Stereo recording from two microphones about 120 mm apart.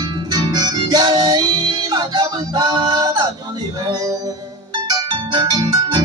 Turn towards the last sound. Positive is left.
turn(degrees=-35)  # may be behind; listen again after turning